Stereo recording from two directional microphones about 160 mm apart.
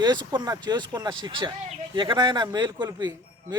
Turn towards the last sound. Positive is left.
turn(degrees=-25)  # may be behind; listen again after turning